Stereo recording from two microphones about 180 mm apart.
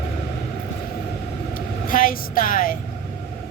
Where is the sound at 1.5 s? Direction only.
50° left (ahead or behind).